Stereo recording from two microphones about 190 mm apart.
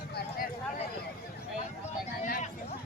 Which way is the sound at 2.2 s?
45° left (ahead or behind).